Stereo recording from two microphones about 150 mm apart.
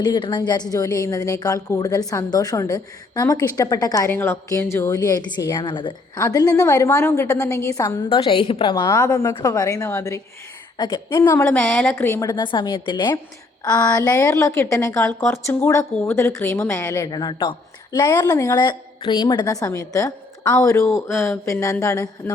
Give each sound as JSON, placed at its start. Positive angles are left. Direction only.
{"t": 0.0, "sound": "a woman's voice", "side_deg": 30}
{"t": 8.1, "sound": "a woman's voice", "side_deg": 35}
{"t": 8.7, "sound": "a woman's voice", "side_deg": 20}
{"t": 12.3, "sound": "a woman's voice", "side_deg": 30}